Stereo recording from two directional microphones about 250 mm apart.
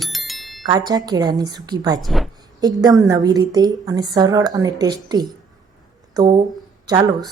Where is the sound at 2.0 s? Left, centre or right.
Centre.